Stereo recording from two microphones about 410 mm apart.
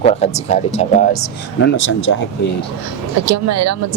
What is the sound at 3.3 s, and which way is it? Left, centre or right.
Speech, right.